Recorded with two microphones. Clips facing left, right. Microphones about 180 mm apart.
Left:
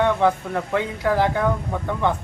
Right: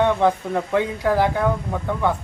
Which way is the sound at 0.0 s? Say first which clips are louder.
Right 1 dB; 15° right (ahead or behind).